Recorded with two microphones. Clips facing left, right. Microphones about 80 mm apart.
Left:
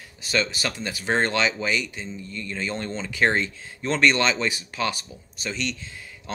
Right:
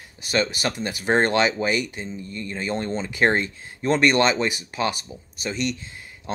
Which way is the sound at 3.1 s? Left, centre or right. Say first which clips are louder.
Right 1 dB; right.